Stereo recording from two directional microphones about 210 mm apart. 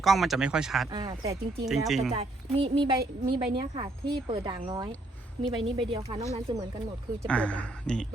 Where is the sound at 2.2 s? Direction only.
25° right (ahead or behind).